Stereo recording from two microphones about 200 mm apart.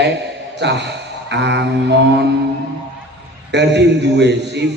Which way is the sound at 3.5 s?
60° right (ahead or behind).